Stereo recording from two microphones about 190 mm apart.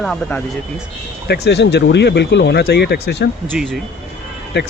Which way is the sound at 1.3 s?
65° left (ahead or behind).